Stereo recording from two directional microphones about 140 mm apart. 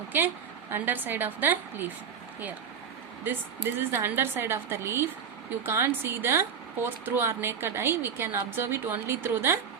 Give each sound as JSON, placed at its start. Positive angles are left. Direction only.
{"t": 0.1, "sound": "speech", "side_deg": -15}
{"t": 3.8, "sound": "speech", "side_deg": -15}